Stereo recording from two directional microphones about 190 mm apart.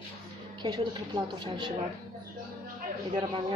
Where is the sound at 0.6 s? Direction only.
25° right (ahead or behind).